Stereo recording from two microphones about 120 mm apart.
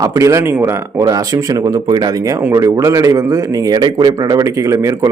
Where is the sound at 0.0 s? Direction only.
25° right (ahead or behind).